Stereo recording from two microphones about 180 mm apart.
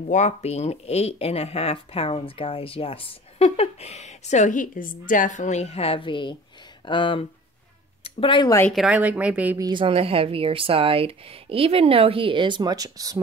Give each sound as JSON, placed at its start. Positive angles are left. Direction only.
{"t": 0.1, "sound": "speech", "side_deg": 40}
{"t": 8.7, "sound": "speech", "side_deg": -5}
{"t": 9.7, "sound": "speech", "side_deg": -30}